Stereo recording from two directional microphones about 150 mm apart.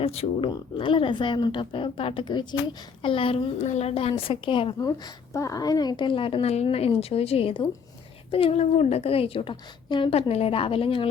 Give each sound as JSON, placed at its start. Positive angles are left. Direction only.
{"t": 0.0, "sound": "a woman's voice", "side_deg": 40}